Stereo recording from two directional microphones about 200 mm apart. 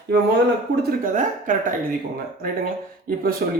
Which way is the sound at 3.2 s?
45° right (ahead or behind).